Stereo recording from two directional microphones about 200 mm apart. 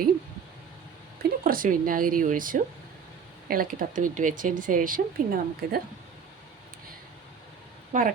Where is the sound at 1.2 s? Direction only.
45° right (ahead or behind).